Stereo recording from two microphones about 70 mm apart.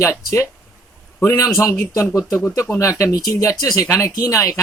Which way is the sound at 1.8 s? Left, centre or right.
Left.